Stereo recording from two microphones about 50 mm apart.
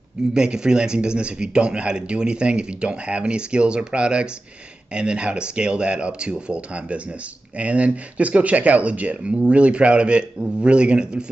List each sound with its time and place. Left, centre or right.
0.3 s speech: centre